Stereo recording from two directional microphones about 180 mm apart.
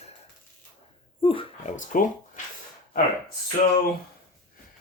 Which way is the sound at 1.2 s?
30° left (ahead or behind).